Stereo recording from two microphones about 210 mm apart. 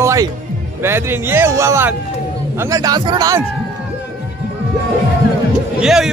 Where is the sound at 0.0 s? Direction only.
15° right (ahead or behind).